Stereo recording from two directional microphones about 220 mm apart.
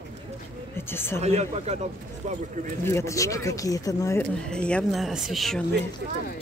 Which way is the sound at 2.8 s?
10° left (ahead or behind).